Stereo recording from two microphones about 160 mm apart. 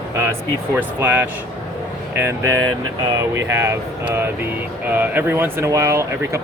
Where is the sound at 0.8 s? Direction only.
10° right (ahead or behind).